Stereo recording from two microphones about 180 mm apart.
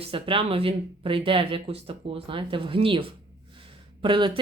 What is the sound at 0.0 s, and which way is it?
Speech, 30° right (ahead or behind).